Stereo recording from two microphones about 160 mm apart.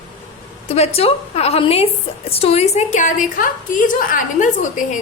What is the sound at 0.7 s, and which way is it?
A woman's voice, 40° left (ahead or behind).